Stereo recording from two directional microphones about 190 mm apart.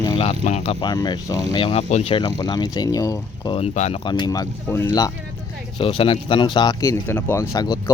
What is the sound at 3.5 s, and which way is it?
Speech, 35° left (ahead or behind).